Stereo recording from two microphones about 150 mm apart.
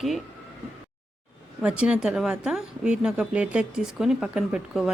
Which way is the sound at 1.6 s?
5° right (ahead or behind).